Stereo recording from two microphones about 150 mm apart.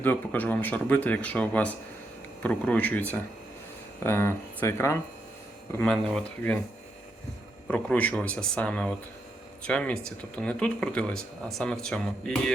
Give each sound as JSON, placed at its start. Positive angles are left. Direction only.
{"t": 0.0, "sound": "a man's voice", "side_deg": 10}
{"t": 5.8, "sound": "speech", "side_deg": 5}
{"t": 7.7, "sound": "a man's voice", "side_deg": 10}